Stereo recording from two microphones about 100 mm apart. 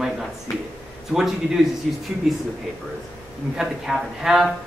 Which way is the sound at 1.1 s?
Centre (ahead or behind).